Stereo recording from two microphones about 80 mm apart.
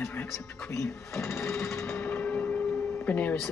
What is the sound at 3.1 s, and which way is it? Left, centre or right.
Speech, left.